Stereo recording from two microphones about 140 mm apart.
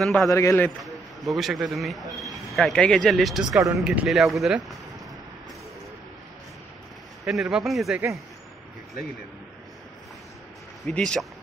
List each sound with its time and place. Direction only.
0.0 s a man's voice: centre (ahead or behind)
0.3 s a man's voice: 20° left (ahead or behind)
0.8 s a man's voice: centre (ahead or behind)
3.5 s speech: 25° right (ahead or behind)
3.8 s a man's voice: 5° right (ahead or behind)
7.2 s a man's voice: 5° right (ahead or behind)
10.9 s speech: 5° left (ahead or behind)